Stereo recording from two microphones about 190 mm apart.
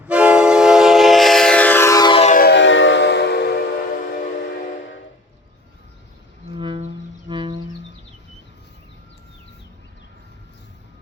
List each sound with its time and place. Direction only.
0.0 s train: 5° right (ahead or behind); by 2.3 s 25° left (ahead or behind)
2.3 s a sound: 55° left (ahead or behind)
6.6 s music: 25° right (ahead or behind)